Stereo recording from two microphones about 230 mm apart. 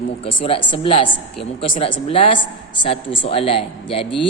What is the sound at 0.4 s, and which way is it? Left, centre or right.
A man's voice, left.